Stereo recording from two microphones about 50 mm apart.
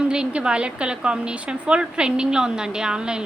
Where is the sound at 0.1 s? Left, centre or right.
Centre.